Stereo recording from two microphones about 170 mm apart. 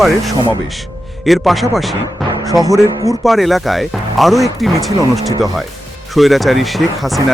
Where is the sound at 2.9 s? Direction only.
20° right (ahead or behind).